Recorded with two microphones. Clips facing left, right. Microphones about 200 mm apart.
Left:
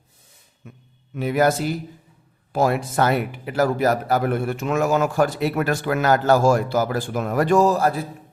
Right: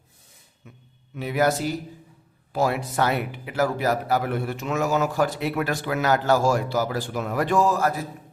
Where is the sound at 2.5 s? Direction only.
50° left (ahead or behind).